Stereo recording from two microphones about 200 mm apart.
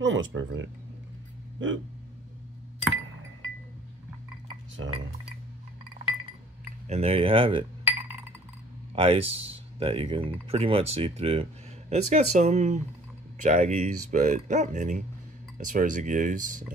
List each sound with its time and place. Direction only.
0.0 s speech: 70° right (ahead or behind)
4.8 s speech: 85° right
6.0 s chink: 25° right (ahead or behind)
6.9 s speech: 30° right (ahead or behind)
8.9 s speech: 30° right (ahead or behind)